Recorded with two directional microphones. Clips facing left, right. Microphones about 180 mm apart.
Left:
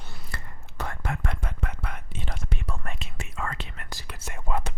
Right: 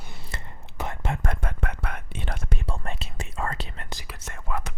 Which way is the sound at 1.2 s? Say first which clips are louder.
Right 3 dB; 50° right (ahead or behind).